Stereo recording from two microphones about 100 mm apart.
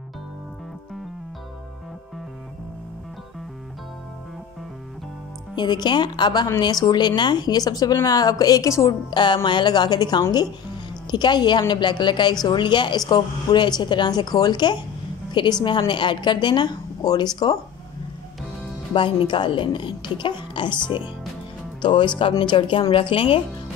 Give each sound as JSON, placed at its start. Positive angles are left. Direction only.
{"t": 5.6, "sound": "a woman's voice", "side_deg": 45}
{"t": 9.1, "sound": "a woman's voice", "side_deg": 50}
{"t": 18.9, "sound": "a woman's voice", "side_deg": 55}
{"t": 21.8, "sound": "speech", "side_deg": 50}